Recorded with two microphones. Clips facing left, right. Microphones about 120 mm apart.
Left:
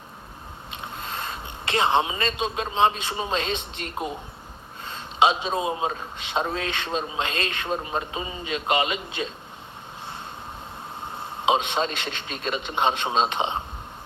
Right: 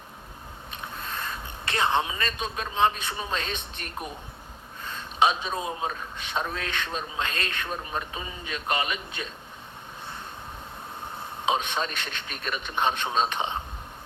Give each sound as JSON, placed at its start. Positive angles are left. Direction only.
{"t": 0.7, "sound": "a sound", "side_deg": 25}
{"t": 2.4, "sound": "a man's voice", "side_deg": 25}
{"t": 4.8, "sound": "a man's voice", "side_deg": 25}
{"t": 5.9, "sound": "a man's voice", "side_deg": 30}
{"t": 11.4, "sound": "a man's voice", "side_deg": 25}